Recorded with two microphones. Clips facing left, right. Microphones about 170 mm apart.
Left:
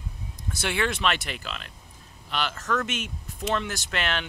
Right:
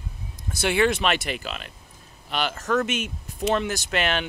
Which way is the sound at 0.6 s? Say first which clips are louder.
Right 5 dB; 10° right (ahead or behind).